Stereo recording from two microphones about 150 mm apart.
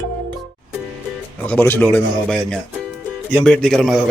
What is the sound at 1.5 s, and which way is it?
Speech, 10° left (ahead or behind).